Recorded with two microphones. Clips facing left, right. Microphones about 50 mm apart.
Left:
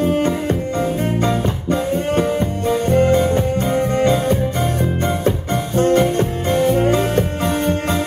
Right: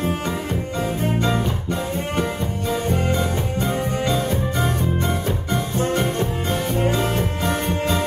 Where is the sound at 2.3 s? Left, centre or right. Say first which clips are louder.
Left 6 dB; left.